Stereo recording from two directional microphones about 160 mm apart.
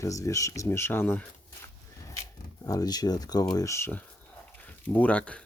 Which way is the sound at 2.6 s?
20° left (ahead or behind).